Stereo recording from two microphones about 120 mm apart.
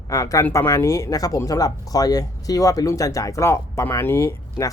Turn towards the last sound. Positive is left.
turn(degrees=25)  # may be behind; listen again after turning